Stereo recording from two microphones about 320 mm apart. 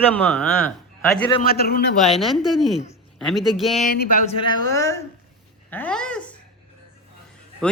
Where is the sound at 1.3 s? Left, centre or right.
Left.